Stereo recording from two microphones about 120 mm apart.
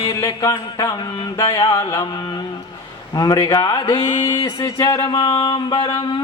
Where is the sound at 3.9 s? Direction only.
50° left (ahead or behind).